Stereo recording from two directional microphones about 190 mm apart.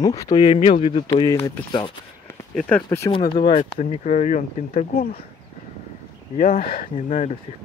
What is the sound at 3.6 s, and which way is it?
Speech, 40° left (ahead or behind).